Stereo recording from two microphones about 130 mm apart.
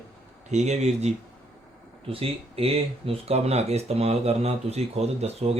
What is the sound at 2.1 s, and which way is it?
Speech, 45° right (ahead or behind).